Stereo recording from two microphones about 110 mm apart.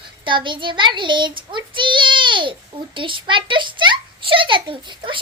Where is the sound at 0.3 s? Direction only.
45° right (ahead or behind).